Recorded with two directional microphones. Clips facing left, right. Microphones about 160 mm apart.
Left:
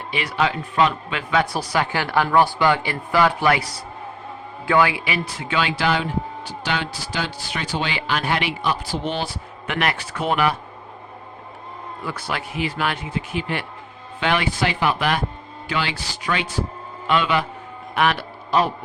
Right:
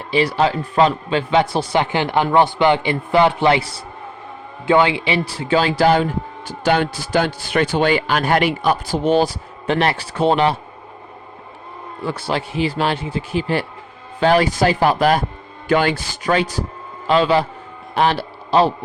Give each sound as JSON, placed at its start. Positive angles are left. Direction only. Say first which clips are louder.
{"t": 0.1, "sound": "a man's voice", "louder": "right 6 dB", "side_deg": -35}
{"t": 12.0, "sound": "a man's voice", "louder": "right 6 dB", "side_deg": -30}